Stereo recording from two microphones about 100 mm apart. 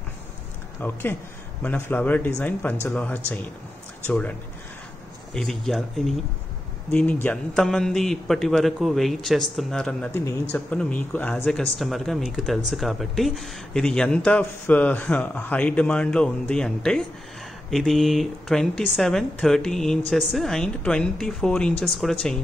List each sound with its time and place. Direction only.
0.7 s speech: 20° left (ahead or behind); by 6.1 s centre (ahead or behind)
6.9 s speech: 15° left (ahead or behind)
7.5 s speech: 5° left (ahead or behind)
11.8 s speech: centre (ahead or behind)